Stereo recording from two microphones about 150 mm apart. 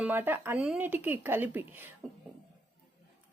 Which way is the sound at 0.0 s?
15° right (ahead or behind).